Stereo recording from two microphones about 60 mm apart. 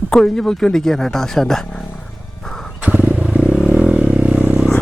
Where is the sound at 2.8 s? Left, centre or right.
Right.